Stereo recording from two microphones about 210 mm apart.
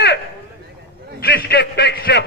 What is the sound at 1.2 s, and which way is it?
A man's voice, 45° left (ahead or behind).